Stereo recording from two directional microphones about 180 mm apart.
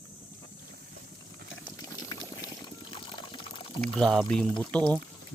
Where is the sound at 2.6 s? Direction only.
25° left (ahead or behind).